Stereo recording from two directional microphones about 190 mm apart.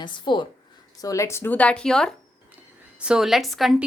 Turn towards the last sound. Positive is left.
turn(degrees=0)  # may be behind; listen again after turning